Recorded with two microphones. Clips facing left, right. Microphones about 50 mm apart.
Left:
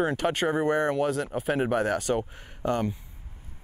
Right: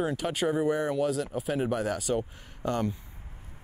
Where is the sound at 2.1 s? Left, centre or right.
Left.